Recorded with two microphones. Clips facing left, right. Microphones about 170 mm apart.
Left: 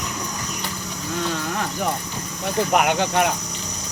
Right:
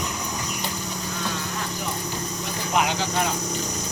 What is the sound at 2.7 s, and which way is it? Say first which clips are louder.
Speech: left 3 dB; 60° left (ahead or behind).